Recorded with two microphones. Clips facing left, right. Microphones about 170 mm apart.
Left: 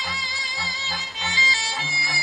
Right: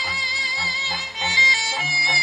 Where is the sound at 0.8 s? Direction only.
20° right (ahead or behind).